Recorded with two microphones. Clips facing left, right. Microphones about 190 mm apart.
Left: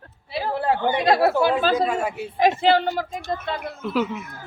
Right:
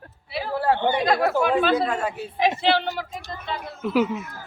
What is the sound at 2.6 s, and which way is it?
Speech, 45° left (ahead or behind).